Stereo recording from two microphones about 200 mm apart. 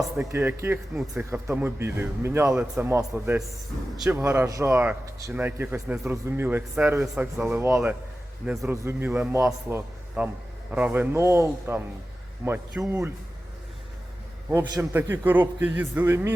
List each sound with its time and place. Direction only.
0.3 s a man's voice: 15° right (ahead or behind)
3.9 s a man's voice: 5° right (ahead or behind)
14.6 s a man's voice: 15° right (ahead or behind)